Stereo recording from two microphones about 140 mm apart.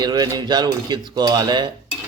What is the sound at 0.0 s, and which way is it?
Speech, 30° right (ahead or behind).